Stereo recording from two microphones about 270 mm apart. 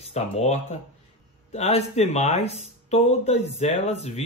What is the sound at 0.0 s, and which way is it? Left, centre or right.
Speech, left.